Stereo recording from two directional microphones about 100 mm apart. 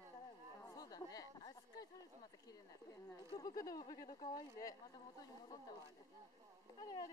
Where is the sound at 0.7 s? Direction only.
40° left (ahead or behind).